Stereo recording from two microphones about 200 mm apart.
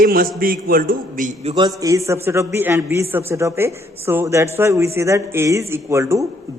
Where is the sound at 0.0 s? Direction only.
45° right (ahead or behind).